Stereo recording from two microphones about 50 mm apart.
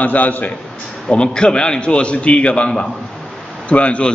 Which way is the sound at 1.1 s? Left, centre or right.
Centre.